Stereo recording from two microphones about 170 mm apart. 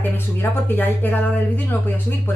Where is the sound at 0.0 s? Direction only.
10° left (ahead or behind).